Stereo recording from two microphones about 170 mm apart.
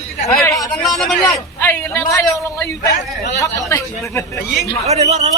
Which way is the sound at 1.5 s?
15° left (ahead or behind).